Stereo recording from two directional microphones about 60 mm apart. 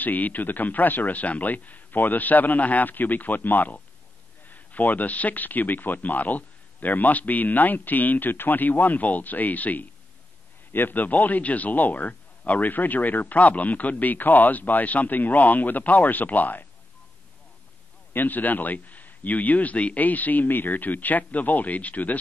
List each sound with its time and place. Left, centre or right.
0.0 s speech: left
18.1 s speech: left